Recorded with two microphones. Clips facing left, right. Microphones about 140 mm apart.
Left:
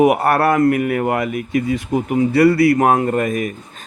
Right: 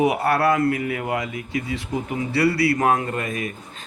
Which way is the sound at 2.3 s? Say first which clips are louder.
Left 7 dB; 50° left (ahead or behind).